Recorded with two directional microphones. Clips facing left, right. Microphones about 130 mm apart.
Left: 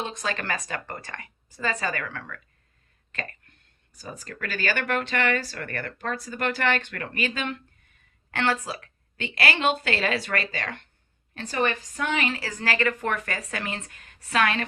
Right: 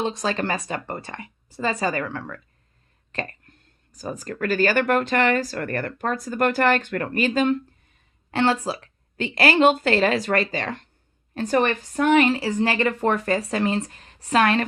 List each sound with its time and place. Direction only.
0.0 s a woman's voice: 30° right (ahead or behind)
3.1 s a sound: 35° right (ahead or behind)
3.9 s speech: 40° right (ahead or behind)
8.3 s a woman's voice: 25° right (ahead or behind)
11.3 s speech: 50° right (ahead or behind)
12.3 s speech: 25° right (ahead or behind)